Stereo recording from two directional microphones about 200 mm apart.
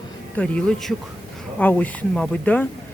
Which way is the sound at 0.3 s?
5° left (ahead or behind).